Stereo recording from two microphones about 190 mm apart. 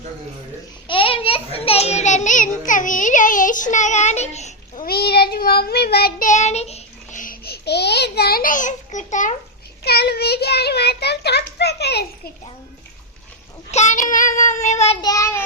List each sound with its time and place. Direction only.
0.9 s a child's voice: 30° left (ahead or behind)
9.8 s a child's voice: 55° left (ahead or behind)
13.7 s child singing: 40° left (ahead or behind)
15.0 s child singing: 15° left (ahead or behind)